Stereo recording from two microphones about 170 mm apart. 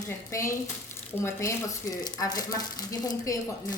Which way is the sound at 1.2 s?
15° left (ahead or behind).